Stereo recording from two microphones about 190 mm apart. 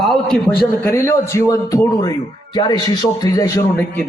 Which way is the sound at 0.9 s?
15° left (ahead or behind).